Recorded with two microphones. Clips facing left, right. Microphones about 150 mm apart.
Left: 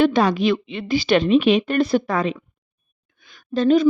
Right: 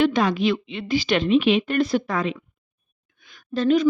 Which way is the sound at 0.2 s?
35° left (ahead or behind).